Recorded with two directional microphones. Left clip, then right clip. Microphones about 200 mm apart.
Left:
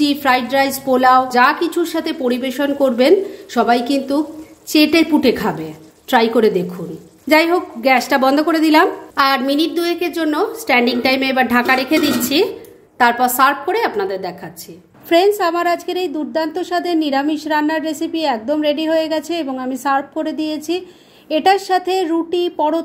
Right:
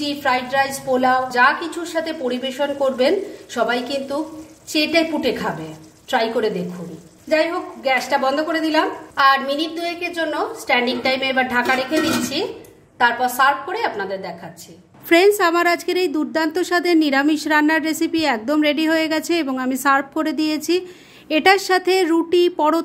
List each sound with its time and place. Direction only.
0.0 s a woman's voice: 35° left (ahead or behind)
15.0 s speech: 20° right (ahead or behind)